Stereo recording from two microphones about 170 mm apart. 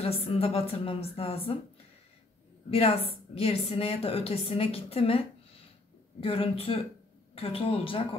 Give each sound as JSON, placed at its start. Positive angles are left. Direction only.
{"t": 0.0, "sound": "a woman's voice", "side_deg": 35}
{"t": 2.7, "sound": "a woman's voice", "side_deg": 35}
{"t": 6.2, "sound": "a woman's voice", "side_deg": 35}